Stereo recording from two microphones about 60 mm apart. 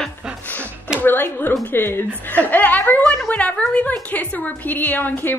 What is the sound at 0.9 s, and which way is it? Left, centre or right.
A woman's voice, left.